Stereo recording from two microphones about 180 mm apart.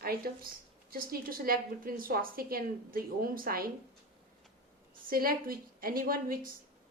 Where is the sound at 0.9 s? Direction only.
55° right (ahead or behind).